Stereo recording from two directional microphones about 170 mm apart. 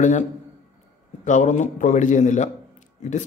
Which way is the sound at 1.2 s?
45° left (ahead or behind).